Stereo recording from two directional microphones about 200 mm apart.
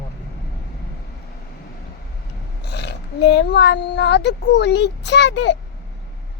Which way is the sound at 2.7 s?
55° left (ahead or behind).